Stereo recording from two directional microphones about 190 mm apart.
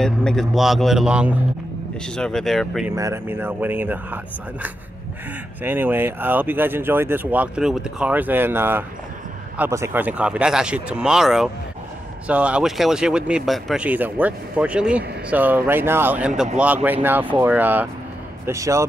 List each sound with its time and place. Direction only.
0.0 s speech: centre (ahead or behind)
3.0 s speech: 15° right (ahead or behind)
5.6 s speech: 10° right (ahead or behind)